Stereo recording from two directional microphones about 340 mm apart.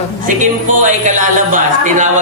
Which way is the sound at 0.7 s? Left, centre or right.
Right.